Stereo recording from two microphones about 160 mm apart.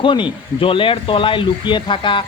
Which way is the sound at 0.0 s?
30° left (ahead or behind).